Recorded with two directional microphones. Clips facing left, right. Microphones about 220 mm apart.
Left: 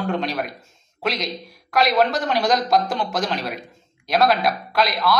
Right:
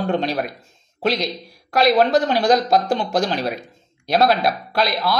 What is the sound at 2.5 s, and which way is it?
Speech, 35° right (ahead or behind).